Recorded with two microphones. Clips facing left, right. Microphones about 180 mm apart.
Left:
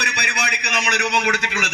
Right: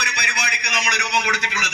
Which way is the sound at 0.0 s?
55° left (ahead or behind).